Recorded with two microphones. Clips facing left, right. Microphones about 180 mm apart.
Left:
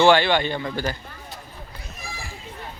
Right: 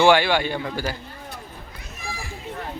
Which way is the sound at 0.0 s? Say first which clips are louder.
Even; 10° right (ahead or behind).